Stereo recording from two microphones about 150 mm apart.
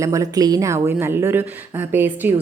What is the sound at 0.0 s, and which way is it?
A woman's voice, 20° right (ahead or behind).